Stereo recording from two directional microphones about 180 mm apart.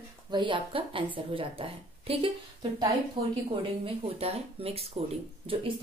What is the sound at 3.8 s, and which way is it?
Speech, 35° right (ahead or behind).